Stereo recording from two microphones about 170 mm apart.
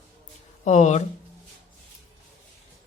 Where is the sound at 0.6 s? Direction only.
45° left (ahead or behind).